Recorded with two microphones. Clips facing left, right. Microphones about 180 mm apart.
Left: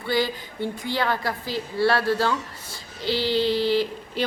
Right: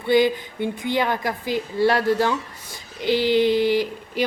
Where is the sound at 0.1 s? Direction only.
20° right (ahead or behind).